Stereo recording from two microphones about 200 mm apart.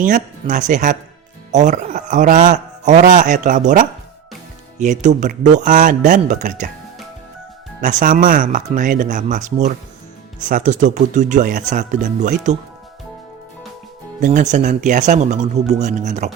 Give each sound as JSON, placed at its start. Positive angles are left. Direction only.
{"t": 0.0, "sound": "speech", "side_deg": -40}
{"t": 4.8, "sound": "speech", "side_deg": -35}
{"t": 7.8, "sound": "speech", "side_deg": -40}
{"t": 14.2, "sound": "speech", "side_deg": -40}